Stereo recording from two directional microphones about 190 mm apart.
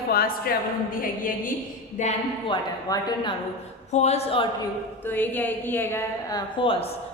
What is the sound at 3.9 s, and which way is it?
Speech, 35° left (ahead or behind).